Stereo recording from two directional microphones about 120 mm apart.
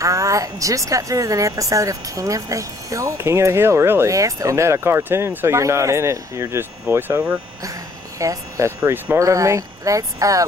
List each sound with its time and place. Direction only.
0.0 s speech: 25° right (ahead or behind)